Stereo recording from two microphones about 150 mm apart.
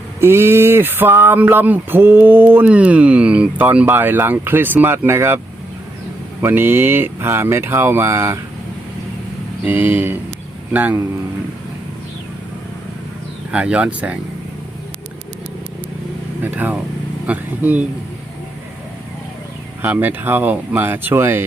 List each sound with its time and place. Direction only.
0.2 s speech: 15° right (ahead or behind)
6.4 s speech: 15° right (ahead or behind)
9.6 s speech: 15° right (ahead or behind)
13.5 s speech: 10° right (ahead or behind)
16.4 s speech: 10° right (ahead or behind)
19.8 s speech: 10° right (ahead or behind)